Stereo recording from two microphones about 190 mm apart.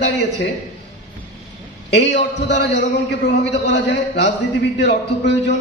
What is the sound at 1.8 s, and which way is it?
A man's voice, 65° left (ahead or behind).